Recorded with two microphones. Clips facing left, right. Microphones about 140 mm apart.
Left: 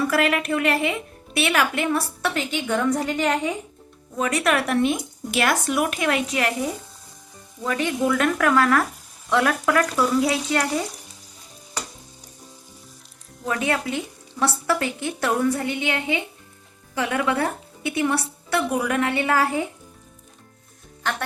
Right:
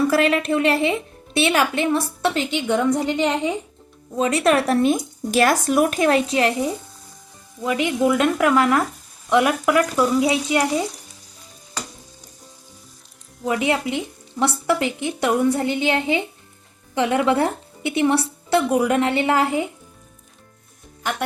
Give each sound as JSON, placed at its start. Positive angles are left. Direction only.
{"t": 0.1, "sound": "speech", "side_deg": -30}
{"t": 7.6, "sound": "speech", "side_deg": -15}
{"t": 13.4, "sound": "speech", "side_deg": -20}